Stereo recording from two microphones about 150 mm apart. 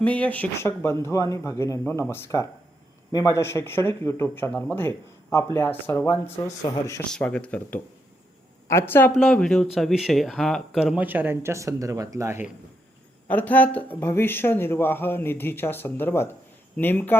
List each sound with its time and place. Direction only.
0.0 s speech: 10° left (ahead or behind)
7.1 s speech: 5° left (ahead or behind)
8.6 s speech: 15° left (ahead or behind); by 12.5 s 20° right (ahead or behind)
13.2 s speech: 10° left (ahead or behind)